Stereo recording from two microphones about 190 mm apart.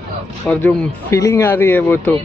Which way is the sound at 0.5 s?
10° left (ahead or behind).